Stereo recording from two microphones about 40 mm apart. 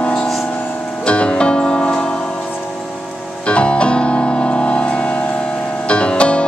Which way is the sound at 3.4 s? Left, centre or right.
Left.